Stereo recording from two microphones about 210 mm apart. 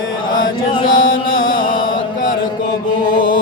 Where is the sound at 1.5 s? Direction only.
40° left (ahead or behind).